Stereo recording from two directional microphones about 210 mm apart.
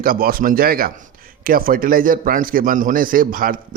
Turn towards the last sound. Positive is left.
turn(degrees=-40)  # may be behind; listen again after turning